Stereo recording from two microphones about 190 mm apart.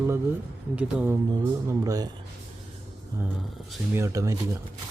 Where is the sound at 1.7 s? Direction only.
20° right (ahead or behind).